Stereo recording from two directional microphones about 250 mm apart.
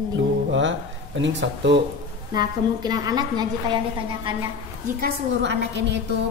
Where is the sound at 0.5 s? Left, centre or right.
Right.